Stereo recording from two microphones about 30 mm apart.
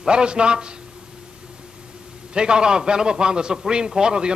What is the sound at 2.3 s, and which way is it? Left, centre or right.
A man's voice, right.